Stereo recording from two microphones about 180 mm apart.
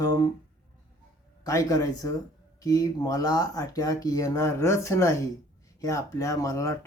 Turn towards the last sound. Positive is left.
turn(degrees=20)  # may be behind; listen again after turning